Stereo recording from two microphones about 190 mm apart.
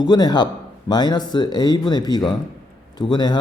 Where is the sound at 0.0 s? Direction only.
20° left (ahead or behind).